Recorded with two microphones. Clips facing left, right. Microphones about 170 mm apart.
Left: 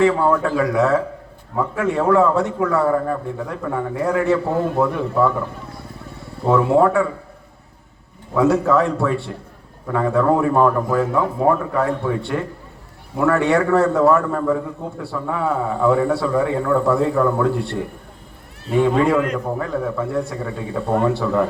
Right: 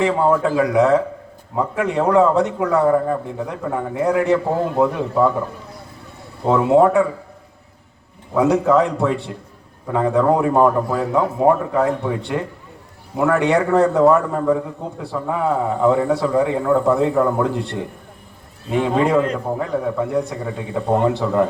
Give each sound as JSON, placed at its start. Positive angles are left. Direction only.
{"t": 0.0, "sound": "a man's voice", "side_deg": -20}
{"t": 6.4, "sound": "a man's voice", "side_deg": -20}
{"t": 8.4, "sound": "a man's voice", "side_deg": -20}